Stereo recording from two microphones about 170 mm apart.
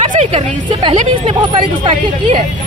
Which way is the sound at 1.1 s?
30° right (ahead or behind).